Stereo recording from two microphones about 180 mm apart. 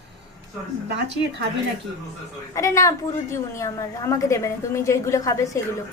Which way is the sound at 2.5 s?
15° left (ahead or behind).